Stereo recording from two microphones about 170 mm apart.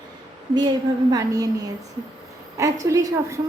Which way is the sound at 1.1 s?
20° right (ahead or behind).